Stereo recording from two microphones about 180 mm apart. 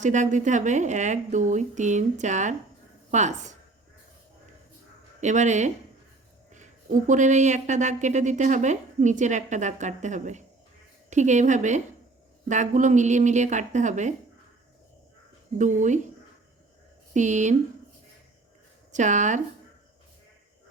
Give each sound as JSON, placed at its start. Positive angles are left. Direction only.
{"t": 0.0, "sound": "a woman's voice", "side_deg": -40}
{"t": 5.2, "sound": "a woman's voice", "side_deg": -40}
{"t": 7.1, "sound": "a woman's voice", "side_deg": -40}
{"t": 15.5, "sound": "a woman's voice", "side_deg": -45}
{"t": 17.2, "sound": "a woman's voice", "side_deg": -40}
{"t": 18.9, "sound": "speech", "side_deg": -40}